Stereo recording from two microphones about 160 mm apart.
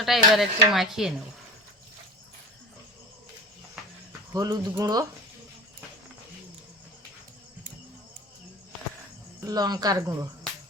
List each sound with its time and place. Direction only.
0.0 s speech: centre (ahead or behind)
4.3 s speech: 25° right (ahead or behind)
9.5 s speech: 25° right (ahead or behind)